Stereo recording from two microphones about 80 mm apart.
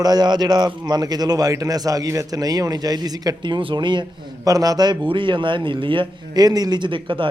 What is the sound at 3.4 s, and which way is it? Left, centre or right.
Speech, right.